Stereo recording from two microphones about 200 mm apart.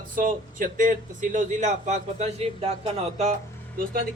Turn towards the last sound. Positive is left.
turn(degrees=-45)  # may be behind; listen again after turning